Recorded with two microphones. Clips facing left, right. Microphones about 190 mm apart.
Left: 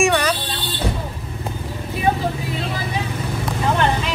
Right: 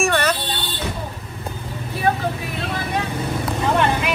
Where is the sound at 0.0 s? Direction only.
5° right (ahead or behind).